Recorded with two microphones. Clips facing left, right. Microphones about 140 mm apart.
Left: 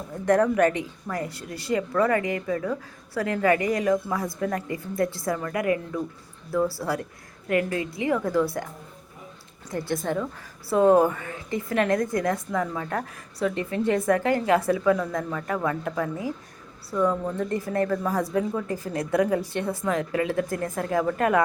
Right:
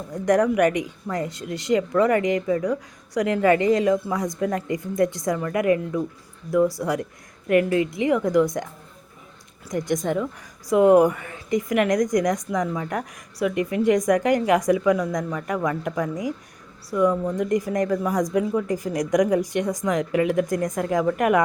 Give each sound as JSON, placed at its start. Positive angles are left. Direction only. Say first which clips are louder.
{"t": 0.1, "sound": "a woman's voice", "louder": "right 2 dB", "side_deg": -15}
{"t": 9.7, "sound": "a woman's voice", "louder": "right 3 dB", "side_deg": -15}